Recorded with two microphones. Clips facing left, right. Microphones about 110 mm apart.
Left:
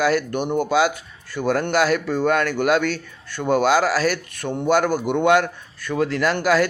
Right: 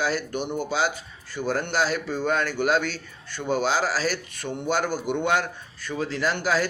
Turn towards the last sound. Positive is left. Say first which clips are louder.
# left 6 dB
turn(degrees=65)  # may be behind; listen again after turning